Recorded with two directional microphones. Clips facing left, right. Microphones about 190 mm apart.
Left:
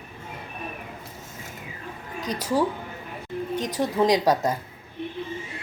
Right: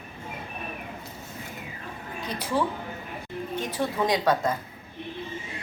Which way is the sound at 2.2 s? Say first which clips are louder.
Left 3 dB; 40° left (ahead or behind).